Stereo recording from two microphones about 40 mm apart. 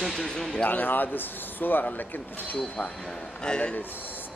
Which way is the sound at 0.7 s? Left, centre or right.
Left.